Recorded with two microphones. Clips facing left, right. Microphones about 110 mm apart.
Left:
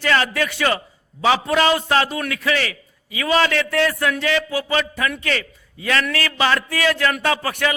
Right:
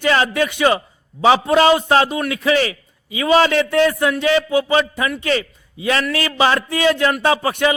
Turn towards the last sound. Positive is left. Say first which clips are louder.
# right 4 dB
turn(degrees=-20)  # may be behind; listen again after turning